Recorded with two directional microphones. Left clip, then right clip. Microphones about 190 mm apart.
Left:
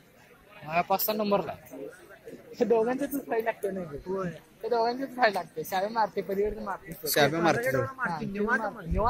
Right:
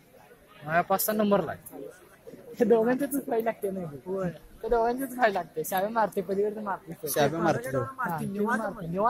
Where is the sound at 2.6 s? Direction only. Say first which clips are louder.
Right 2 dB; 45° right (ahead or behind).